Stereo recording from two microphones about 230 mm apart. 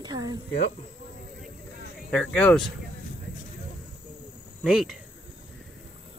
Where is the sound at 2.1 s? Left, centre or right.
Centre.